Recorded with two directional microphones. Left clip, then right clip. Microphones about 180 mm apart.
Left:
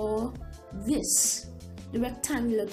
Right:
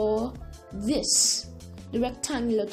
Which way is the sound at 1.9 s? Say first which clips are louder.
Right 2 dB; 35° right (ahead or behind).